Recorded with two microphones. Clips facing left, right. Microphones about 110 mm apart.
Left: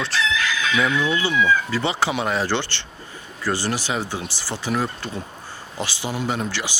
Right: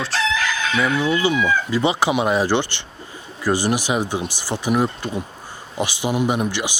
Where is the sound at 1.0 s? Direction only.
15° right (ahead or behind).